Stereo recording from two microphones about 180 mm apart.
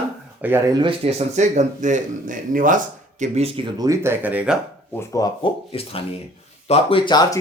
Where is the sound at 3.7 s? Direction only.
20° right (ahead or behind).